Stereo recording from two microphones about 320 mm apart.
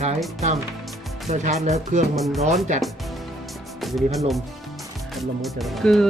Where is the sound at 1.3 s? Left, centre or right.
Right.